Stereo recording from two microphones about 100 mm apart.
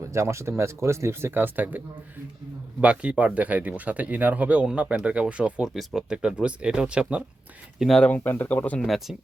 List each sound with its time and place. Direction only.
0.0 s speech: 30° right (ahead or behind)
2.8 s speech: 10° right (ahead or behind)
7.8 s speech: 5° left (ahead or behind)
8.1 s speech: 20° left (ahead or behind)
8.8 s speech: centre (ahead or behind)